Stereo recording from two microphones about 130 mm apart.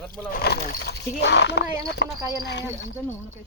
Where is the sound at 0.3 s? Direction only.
90° left.